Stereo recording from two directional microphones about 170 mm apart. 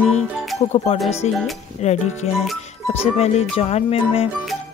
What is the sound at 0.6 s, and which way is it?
Speech, 40° left (ahead or behind).